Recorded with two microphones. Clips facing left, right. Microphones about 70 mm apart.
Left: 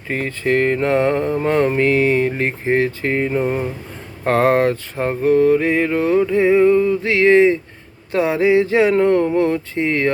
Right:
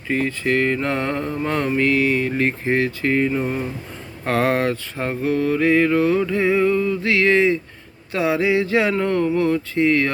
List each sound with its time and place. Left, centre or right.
0.1 s mantra: left